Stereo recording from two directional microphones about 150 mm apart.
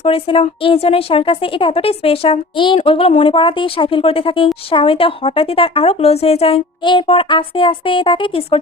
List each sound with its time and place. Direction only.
0.0 s speech: 40° left (ahead or behind)